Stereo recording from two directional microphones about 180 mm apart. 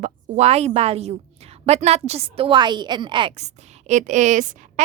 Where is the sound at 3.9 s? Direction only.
45° right (ahead or behind).